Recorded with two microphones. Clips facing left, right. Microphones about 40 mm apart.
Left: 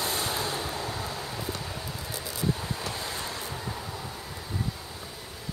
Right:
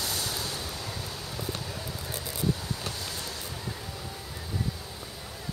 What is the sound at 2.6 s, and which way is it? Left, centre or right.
Waves, left.